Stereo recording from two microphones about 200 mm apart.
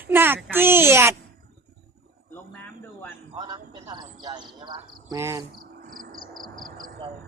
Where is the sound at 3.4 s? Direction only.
25° right (ahead or behind).